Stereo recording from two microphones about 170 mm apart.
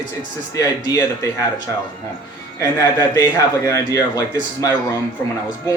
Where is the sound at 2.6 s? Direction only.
25° left (ahead or behind).